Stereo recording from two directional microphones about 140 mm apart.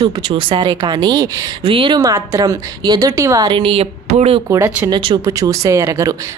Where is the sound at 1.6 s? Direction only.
40° right (ahead or behind).